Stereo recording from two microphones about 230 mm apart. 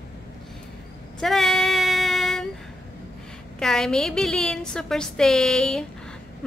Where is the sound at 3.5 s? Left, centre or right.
Centre.